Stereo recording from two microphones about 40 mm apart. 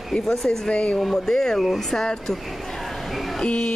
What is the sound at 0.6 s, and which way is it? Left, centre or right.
Speech, left.